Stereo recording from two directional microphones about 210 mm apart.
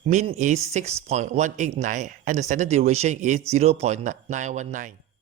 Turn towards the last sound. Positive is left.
turn(degrees=-35)  # may be behind; listen again after turning